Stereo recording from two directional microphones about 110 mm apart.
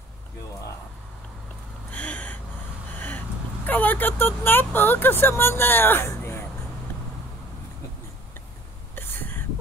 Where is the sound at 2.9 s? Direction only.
15° left (ahead or behind).